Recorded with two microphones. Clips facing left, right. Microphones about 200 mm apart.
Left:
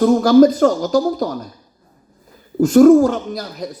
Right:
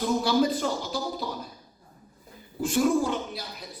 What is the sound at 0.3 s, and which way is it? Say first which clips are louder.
Speech: left 14 dB; 45° left (ahead or behind).